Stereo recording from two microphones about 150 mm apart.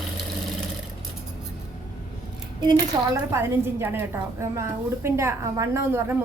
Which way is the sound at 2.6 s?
25° right (ahead or behind).